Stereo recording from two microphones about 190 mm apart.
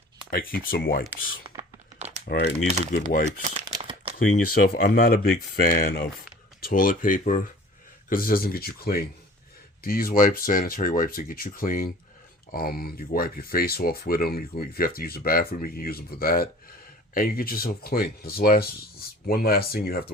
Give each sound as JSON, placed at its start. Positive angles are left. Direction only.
{"t": 0.3, "sound": "speech", "side_deg": 50}
{"t": 1.5, "sound": "computer keyboard", "side_deg": -25}
{"t": 2.2, "sound": "speech", "side_deg": 55}
{"t": 3.2, "sound": "crumpling", "side_deg": -35}
{"t": 4.2, "sound": "speech", "side_deg": 50}